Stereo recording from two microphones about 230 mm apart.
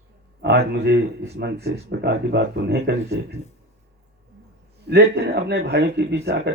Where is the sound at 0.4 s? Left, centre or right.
Right.